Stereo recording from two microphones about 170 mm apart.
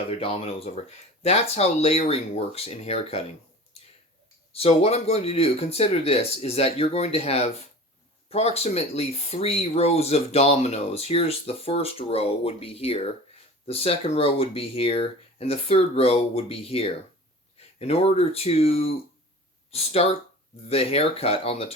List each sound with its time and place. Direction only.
0.1 s speech: 35° left (ahead or behind)
4.5 s speech: 35° left (ahead or behind)